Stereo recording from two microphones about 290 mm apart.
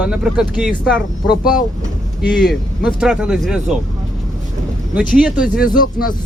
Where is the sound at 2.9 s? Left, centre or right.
Centre.